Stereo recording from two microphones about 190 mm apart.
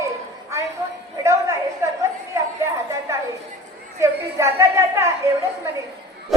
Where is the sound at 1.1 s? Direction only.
15° right (ahead or behind).